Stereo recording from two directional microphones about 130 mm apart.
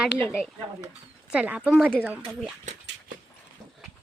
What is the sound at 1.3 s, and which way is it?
A woman's voice, 10° right (ahead or behind).